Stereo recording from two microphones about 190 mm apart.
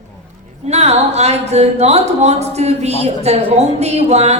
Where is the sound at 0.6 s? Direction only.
35° right (ahead or behind).